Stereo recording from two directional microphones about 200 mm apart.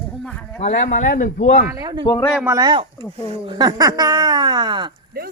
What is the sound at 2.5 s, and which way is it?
Speech, 20° right (ahead or behind).